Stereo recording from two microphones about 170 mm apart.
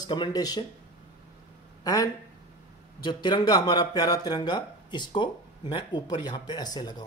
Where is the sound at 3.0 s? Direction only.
25° left (ahead or behind).